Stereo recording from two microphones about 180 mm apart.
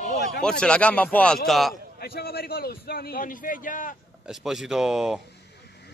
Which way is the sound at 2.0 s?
60° left (ahead or behind).